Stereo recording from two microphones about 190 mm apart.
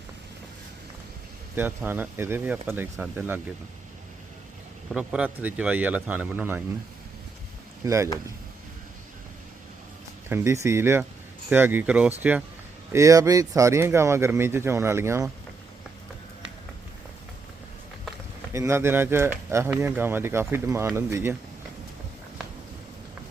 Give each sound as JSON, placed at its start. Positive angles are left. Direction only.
{"t": 1.5, "sound": "speech", "side_deg": -10}
{"t": 4.9, "sound": "speech", "side_deg": -5}
{"t": 7.9, "sound": "speech", "side_deg": -15}
{"t": 10.2, "sound": "speech", "side_deg": -15}
{"t": 18.5, "sound": "speech", "side_deg": -15}